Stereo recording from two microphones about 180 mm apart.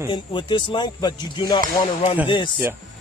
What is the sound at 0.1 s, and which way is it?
Speech, 25° left (ahead or behind).